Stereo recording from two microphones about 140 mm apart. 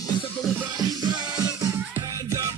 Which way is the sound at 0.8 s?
30° right (ahead or behind).